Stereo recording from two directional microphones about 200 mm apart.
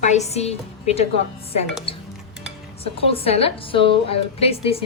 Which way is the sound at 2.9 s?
30° left (ahead or behind).